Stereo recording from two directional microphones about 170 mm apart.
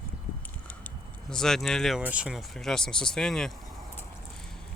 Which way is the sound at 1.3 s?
5° left (ahead or behind).